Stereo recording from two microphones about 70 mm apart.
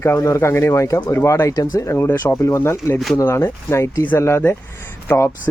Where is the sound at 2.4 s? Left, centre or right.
Left.